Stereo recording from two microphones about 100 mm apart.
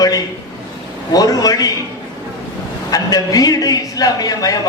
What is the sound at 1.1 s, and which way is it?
Speech, 40° left (ahead or behind).